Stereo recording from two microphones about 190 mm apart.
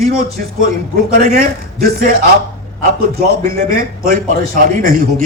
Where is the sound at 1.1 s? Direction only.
50° right (ahead or behind).